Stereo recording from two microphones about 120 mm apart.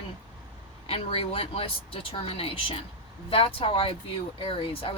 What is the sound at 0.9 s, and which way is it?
Speech, 50° left (ahead or behind).